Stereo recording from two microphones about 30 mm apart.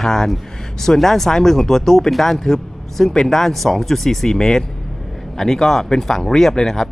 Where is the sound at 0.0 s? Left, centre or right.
Centre.